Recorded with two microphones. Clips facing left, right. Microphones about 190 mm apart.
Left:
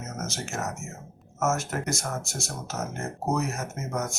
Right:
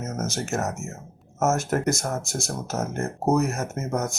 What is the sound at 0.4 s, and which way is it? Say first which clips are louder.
Speech: right 5 dB; 45° right (ahead or behind).